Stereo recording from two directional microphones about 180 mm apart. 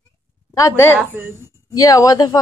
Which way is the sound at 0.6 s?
15° left (ahead or behind).